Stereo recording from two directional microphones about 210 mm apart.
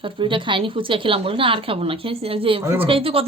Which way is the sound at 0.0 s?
25° right (ahead or behind).